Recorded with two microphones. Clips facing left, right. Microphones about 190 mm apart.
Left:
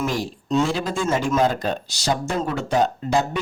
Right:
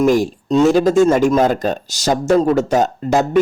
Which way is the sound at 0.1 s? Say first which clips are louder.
Right 9 dB; 40° right (ahead or behind).